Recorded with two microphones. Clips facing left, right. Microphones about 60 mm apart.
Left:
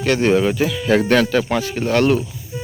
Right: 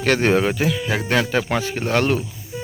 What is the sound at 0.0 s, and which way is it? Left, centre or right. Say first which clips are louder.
Speech: left 2 dB; right.